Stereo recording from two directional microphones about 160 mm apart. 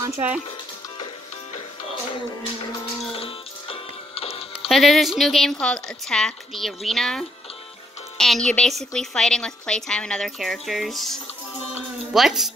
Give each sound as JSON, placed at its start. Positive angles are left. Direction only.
{"t": 0.0, "sound": "speech", "side_deg": -20}
{"t": 3.1, "sound": "music", "side_deg": 35}
{"t": 4.6, "sound": "a woman's voice", "side_deg": 0}